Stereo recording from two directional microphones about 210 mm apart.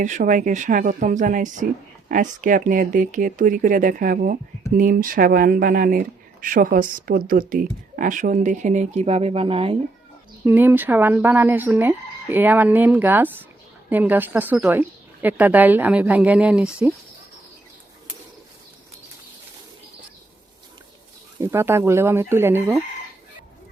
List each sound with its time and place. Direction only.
0.0 s speech: 35° right (ahead or behind)
10.4 s speech: 10° right (ahead or behind)
21.4 s speech: 10° right (ahead or behind)